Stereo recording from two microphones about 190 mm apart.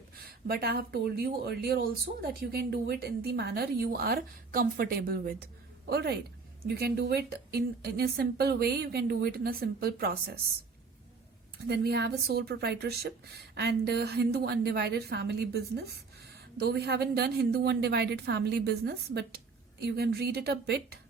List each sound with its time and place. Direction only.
0.3 s a woman's voice: 55° right (ahead or behind)
11.6 s speech: 60° right (ahead or behind)